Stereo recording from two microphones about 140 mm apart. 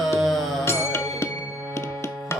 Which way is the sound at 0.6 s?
20° left (ahead or behind).